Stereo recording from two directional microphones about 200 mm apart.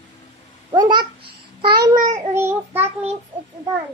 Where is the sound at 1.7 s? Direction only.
45° right (ahead or behind).